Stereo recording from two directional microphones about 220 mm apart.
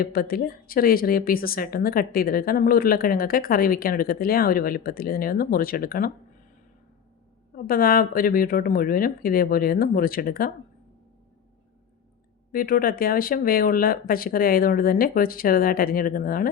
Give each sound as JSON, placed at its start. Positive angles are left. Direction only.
{"t": 0.0, "sound": "a woman's voice", "side_deg": 40}
{"t": 7.5, "sound": "a woman's voice", "side_deg": 40}
{"t": 12.5, "sound": "a woman's voice", "side_deg": 40}